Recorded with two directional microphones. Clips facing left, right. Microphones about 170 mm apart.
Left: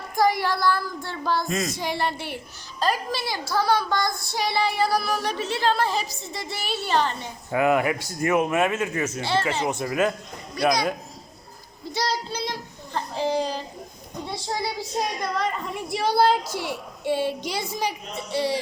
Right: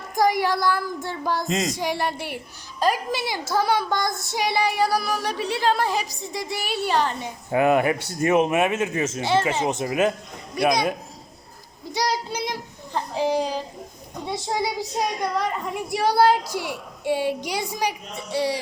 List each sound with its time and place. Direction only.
0.2 s a woman's voice: 15° right (ahead or behind)
7.5 s speech: 25° right (ahead or behind)
11.9 s a child's voice: 15° right (ahead or behind)